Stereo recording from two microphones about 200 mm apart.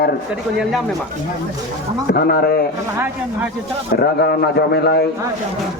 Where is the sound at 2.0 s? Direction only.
50° left (ahead or behind).